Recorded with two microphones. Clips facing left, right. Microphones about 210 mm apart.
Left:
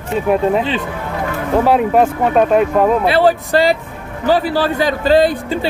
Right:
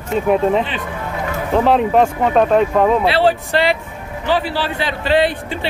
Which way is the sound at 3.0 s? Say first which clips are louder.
Left 2 dB; 45° left (ahead or behind).